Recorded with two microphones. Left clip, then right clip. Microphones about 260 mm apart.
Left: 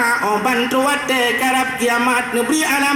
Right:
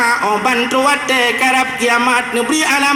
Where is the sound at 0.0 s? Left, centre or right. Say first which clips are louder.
Right 3 dB; centre.